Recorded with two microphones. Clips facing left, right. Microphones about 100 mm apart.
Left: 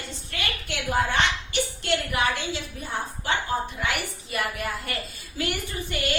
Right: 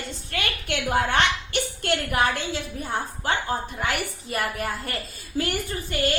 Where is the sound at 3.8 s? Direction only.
40° right (ahead or behind).